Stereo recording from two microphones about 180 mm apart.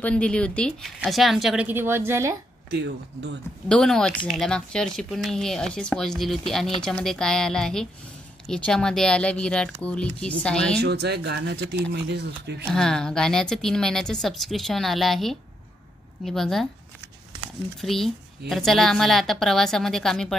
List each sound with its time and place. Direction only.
0.0 s speech: 5° left (ahead or behind); by 2.3 s 15° right (ahead or behind)
2.7 s speech: 70° right (ahead or behind)
3.6 s speech: 5° left (ahead or behind)
10.8 s speech: 65° right (ahead or behind)
12.7 s speech: 5° left (ahead or behind)